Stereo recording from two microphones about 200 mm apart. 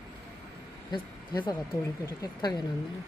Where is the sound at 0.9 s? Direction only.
25° left (ahead or behind).